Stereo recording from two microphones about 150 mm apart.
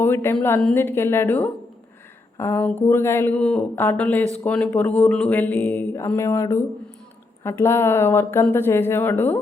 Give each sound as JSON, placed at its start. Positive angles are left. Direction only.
{"t": 0.0, "sound": "speech", "side_deg": 15}